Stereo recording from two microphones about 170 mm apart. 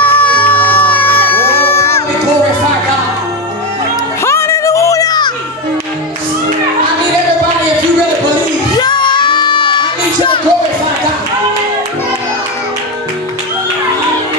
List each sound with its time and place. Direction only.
0.0 s music: 10° left (ahead or behind)
4.2 s children playing: 15° left (ahead or behind)
8.7 s music: 25° left (ahead or behind)